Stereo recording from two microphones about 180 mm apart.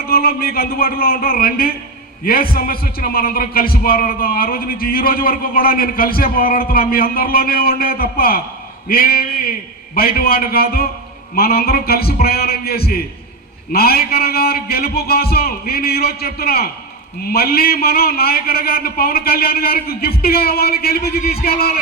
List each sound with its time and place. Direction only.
0.1 s a man's voice: 55° left (ahead or behind)